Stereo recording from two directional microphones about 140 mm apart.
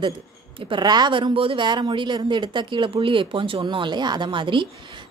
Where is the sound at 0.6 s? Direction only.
35° right (ahead or behind).